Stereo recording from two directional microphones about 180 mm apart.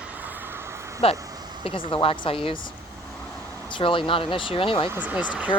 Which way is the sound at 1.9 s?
30° left (ahead or behind).